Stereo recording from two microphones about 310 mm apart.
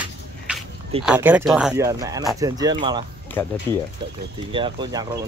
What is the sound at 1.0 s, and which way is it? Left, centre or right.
Speech, centre.